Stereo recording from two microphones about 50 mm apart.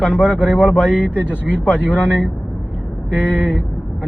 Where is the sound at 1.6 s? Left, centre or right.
Left.